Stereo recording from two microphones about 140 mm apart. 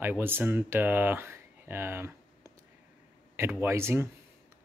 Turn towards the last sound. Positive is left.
turn(degrees=-20)  # may be behind; listen again after turning